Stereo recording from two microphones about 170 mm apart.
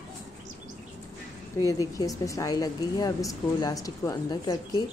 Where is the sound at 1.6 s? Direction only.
20° left (ahead or behind).